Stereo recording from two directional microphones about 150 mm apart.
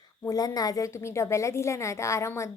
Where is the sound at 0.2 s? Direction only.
25° left (ahead or behind).